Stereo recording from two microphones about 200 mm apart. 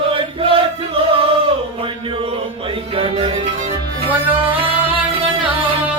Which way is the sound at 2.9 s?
25° right (ahead or behind).